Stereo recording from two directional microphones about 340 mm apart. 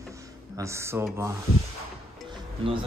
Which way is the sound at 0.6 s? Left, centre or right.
Centre.